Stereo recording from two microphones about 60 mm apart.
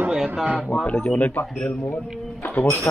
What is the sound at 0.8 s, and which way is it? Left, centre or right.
Speech, left.